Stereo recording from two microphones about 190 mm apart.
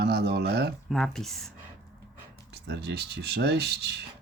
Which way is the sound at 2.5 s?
60° right (ahead or behind).